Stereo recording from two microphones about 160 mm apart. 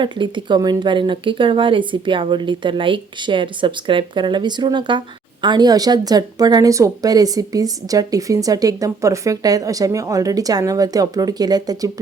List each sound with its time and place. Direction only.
0.0 s speech: 30° right (ahead or behind)